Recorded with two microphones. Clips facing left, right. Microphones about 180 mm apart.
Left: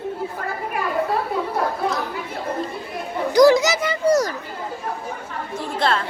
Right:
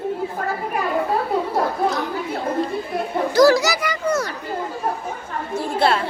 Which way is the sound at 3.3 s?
20° left (ahead or behind).